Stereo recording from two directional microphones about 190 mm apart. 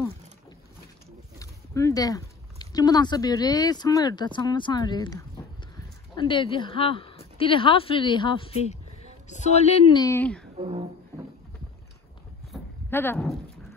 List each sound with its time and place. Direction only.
1.4 s a woman's voice: 15° left (ahead or behind); by 9.9 s 30° left (ahead or behind)
9.9 s speech: 15° left (ahead or behind)
10.6 s music: 35° right (ahead or behind)
12.5 s a sound: centre (ahead or behind)
12.9 s speech: 10° left (ahead or behind)